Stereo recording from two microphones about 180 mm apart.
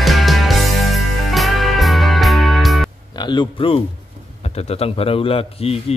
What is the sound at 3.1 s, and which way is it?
A man's voice, 25° left (ahead or behind).